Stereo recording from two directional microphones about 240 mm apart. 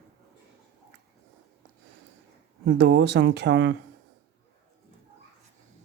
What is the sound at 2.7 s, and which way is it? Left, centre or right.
Speech, right.